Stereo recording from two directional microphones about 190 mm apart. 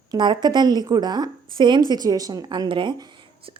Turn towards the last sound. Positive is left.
turn(degrees=-25)  # may be behind; listen again after turning